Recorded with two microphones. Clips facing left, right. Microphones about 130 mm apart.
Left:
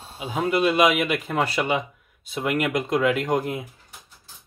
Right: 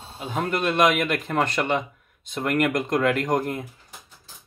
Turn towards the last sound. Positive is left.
turn(degrees=5)  # may be behind; listen again after turning